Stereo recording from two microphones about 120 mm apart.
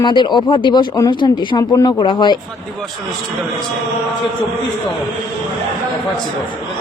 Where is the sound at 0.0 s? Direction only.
40° left (ahead or behind).